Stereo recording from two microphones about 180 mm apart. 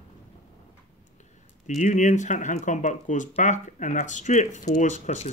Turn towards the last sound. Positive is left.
turn(degrees=35)  # may be behind; listen again after turning